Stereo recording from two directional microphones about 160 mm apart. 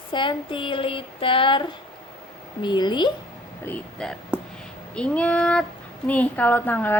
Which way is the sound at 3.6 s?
5° left (ahead or behind).